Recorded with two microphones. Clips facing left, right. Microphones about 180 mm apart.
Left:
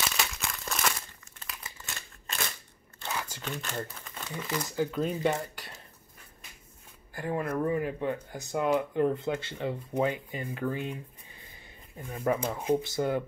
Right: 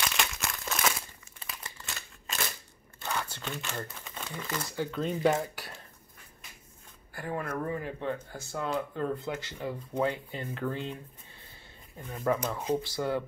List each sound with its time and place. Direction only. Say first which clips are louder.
0.0 s crumpling: even; centre (ahead or behind)
1.5 s a sound: right 1 dB; centre (ahead or behind)
3.9 s speech: left 1 dB; centre (ahead or behind)
5.2 s speech: right 2 dB; 5° right (ahead or behind)
7.2 s speech: left 4 dB; 20° left (ahead or behind)
12.1 s speech: left 1 dB; 15° left (ahead or behind)